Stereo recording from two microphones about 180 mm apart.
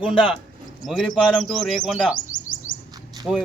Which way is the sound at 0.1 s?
25° left (ahead or behind).